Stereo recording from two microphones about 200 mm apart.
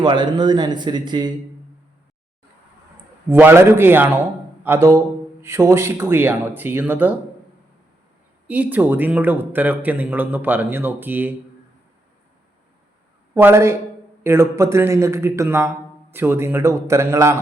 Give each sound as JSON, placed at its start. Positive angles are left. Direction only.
{"t": 0.0, "sound": "speech", "side_deg": -20}
{"t": 3.2, "sound": "speech", "side_deg": -10}
{"t": 8.4, "sound": "speech", "side_deg": -10}
{"t": 13.3, "sound": "speech", "side_deg": -15}